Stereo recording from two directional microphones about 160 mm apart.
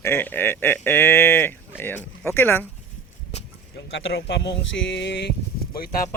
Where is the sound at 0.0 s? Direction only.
15° left (ahead or behind).